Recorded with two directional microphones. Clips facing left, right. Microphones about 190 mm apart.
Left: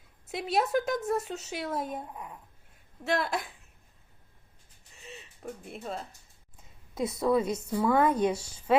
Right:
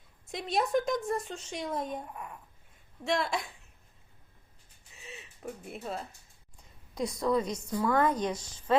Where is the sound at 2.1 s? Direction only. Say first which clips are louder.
Even; 20° left (ahead or behind).